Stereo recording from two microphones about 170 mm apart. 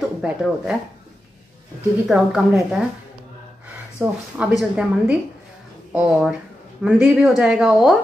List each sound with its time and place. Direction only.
0.2 s speech: 5° right (ahead or behind)
2.0 s speech: 5° right (ahead or behind)
4.0 s speech: 5° right (ahead or behind)